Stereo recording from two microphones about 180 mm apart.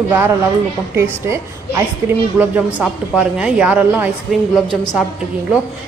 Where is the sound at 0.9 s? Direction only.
15° right (ahead or behind).